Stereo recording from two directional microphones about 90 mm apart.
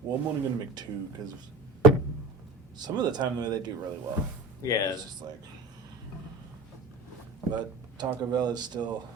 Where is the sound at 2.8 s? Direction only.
50° right (ahead or behind).